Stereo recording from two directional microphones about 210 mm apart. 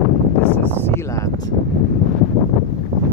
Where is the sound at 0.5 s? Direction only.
10° left (ahead or behind).